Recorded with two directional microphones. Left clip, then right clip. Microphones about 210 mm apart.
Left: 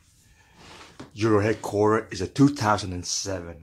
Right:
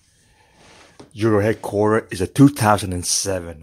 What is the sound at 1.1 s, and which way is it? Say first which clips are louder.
Speech: right 4 dB; 35° right (ahead or behind).